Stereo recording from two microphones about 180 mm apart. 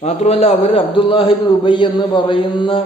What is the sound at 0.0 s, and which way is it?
A man's voice, 35° left (ahead or behind).